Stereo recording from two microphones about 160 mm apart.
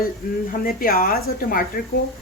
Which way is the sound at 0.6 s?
65° left (ahead or behind).